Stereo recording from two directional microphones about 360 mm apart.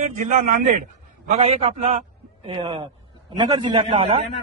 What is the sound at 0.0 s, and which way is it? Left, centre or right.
A man's voice, centre.